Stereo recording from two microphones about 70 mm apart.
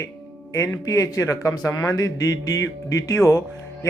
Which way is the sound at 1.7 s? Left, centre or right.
Left.